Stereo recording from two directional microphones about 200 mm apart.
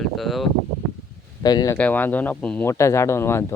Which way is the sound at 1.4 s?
20° left (ahead or behind).